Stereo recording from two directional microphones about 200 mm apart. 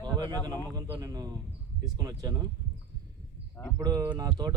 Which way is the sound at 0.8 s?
20° right (ahead or behind).